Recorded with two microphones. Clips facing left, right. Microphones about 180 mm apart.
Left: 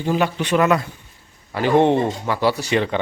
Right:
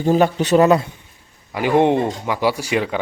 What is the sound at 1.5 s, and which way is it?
A man's voice, 10° right (ahead or behind).